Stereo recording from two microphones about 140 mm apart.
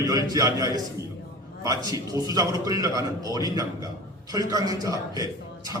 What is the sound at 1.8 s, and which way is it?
A man's voice, 25° right (ahead or behind).